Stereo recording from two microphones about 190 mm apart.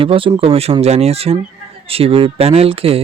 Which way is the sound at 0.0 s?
30° right (ahead or behind).